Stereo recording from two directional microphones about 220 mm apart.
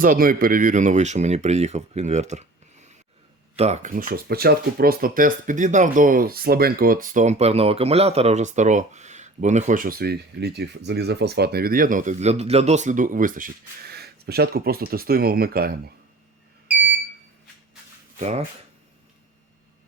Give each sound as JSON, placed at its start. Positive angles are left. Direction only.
{"t": 0.0, "sound": "speech", "side_deg": -40}
{"t": 18.2, "sound": "speech", "side_deg": -30}